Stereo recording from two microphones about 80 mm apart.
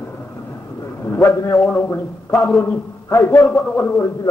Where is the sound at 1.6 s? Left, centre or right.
Centre.